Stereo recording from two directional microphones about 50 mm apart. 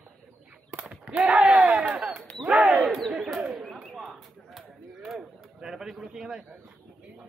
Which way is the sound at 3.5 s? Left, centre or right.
Centre.